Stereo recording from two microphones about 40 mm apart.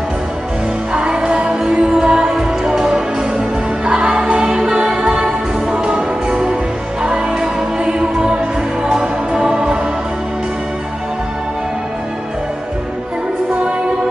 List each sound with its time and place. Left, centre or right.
0.9 s music: right
4.6 s music: centre
5.7 s music: right